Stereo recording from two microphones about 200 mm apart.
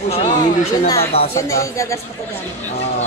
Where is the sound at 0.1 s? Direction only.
35° left (ahead or behind).